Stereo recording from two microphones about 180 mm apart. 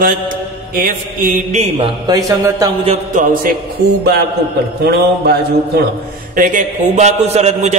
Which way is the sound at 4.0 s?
65° right (ahead or behind).